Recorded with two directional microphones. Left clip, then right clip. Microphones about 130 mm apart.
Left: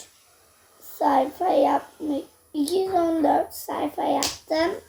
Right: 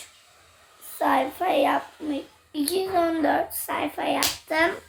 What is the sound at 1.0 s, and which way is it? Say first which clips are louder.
Speech: left 2 dB; 25° right (ahead or behind).